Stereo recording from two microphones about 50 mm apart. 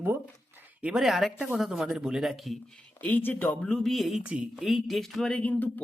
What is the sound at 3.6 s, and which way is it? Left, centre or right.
Speech, centre.